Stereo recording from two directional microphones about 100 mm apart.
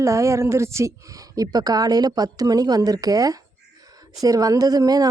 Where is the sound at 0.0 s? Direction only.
30° right (ahead or behind).